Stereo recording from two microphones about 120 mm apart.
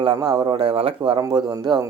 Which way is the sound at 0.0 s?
35° right (ahead or behind).